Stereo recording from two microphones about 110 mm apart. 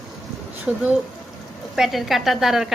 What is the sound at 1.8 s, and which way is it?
Speech, centre (ahead or behind).